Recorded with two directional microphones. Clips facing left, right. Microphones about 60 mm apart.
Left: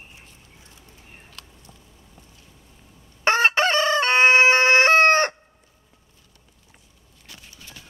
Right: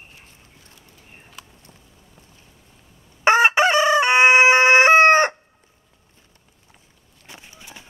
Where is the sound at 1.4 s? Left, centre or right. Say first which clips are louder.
Right 3 dB; centre.